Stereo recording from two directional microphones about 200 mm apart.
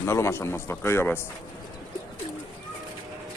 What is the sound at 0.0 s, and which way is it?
Speech, 15° left (ahead or behind).